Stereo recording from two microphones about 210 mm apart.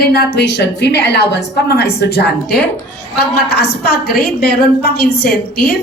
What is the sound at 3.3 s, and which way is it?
A woman's voice, 50° left (ahead or behind).